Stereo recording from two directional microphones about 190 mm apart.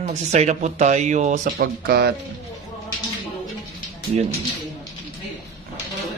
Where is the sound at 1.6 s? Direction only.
55° right (ahead or behind).